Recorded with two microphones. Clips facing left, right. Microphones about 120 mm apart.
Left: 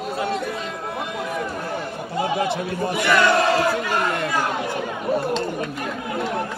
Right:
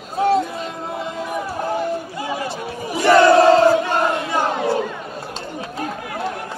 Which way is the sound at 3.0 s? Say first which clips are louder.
Right 7 dB; 30° right (ahead or behind).